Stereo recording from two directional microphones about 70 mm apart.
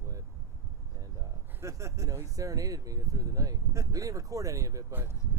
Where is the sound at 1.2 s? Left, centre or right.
Right.